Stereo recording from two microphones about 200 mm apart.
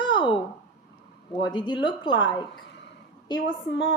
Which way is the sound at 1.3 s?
20° left (ahead or behind).